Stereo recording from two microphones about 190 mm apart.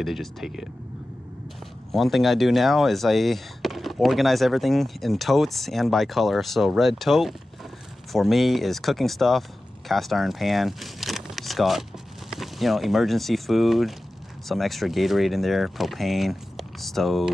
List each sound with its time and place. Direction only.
0.0 s speech: centre (ahead or behind)
1.9 s speech: centre (ahead or behind)